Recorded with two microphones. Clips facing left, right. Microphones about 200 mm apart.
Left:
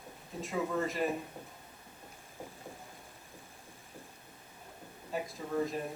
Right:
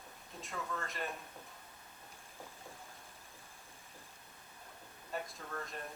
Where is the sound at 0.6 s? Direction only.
15° left (ahead or behind).